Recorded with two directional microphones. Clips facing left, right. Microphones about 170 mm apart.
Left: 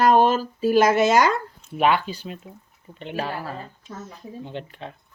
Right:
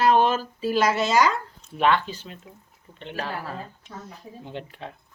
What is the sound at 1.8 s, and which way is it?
Speech, 15° left (ahead or behind).